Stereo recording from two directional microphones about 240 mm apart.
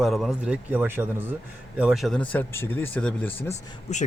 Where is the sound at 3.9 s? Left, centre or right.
Left.